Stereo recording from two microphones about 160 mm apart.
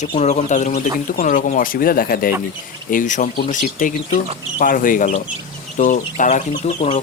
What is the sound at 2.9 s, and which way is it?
Speech, 55° left (ahead or behind).